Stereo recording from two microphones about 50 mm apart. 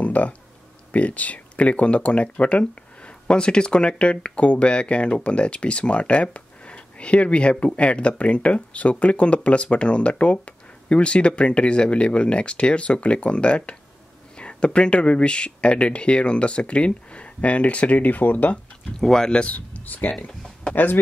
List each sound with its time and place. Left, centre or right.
0.0 s a sound: left
0.9 s speech: left
18.9 s speech: centre
19.4 s speech: left